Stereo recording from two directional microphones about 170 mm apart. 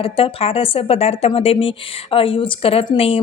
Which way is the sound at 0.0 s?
35° left (ahead or behind).